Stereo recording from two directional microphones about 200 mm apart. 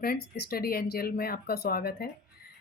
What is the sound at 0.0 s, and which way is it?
Speech, 50° left (ahead or behind).